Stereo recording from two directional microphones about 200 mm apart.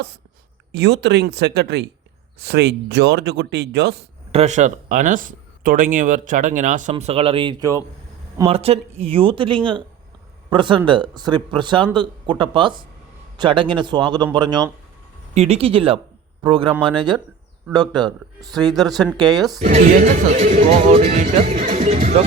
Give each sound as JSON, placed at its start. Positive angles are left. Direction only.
{"t": 0.7, "sound": "speech", "side_deg": -60}
{"t": 4.3, "sound": "speech", "side_deg": -35}
{"t": 18.9, "sound": "speech", "side_deg": 0}
{"t": 19.1, "sound": "speech", "side_deg": -20}
{"t": 19.4, "sound": "speech", "side_deg": 0}
{"t": 19.6, "sound": "speech", "side_deg": -40}